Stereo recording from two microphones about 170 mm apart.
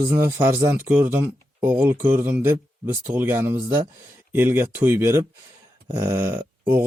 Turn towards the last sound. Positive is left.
turn(degrees=-15)  # may be behind; listen again after turning